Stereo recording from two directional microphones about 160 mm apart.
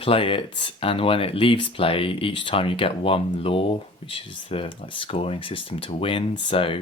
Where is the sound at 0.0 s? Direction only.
35° left (ahead or behind).